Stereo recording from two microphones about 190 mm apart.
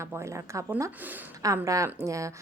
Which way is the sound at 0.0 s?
15° right (ahead or behind).